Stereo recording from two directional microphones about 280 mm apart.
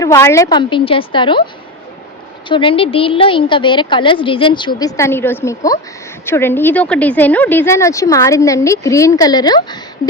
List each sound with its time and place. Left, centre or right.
0.0 s a woman's voice: centre
2.5 s a woman's voice: centre